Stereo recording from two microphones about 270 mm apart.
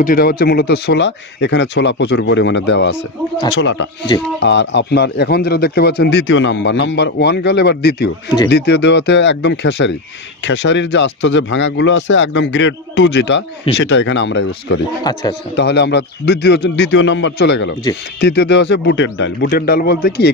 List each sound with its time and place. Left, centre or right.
0.0 s speech: left
15.1 s speech: centre
15.5 s speech: left